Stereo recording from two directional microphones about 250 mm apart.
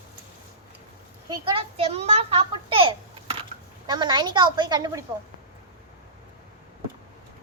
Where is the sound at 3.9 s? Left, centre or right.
Centre.